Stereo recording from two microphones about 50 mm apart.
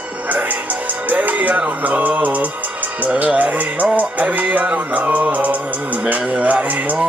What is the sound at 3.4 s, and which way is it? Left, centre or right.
Speech, right.